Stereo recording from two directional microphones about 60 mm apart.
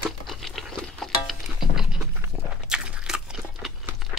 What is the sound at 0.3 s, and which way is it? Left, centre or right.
Music, centre.